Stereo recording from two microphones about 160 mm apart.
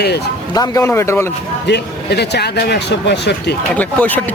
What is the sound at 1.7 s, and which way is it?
Speech, 90° left.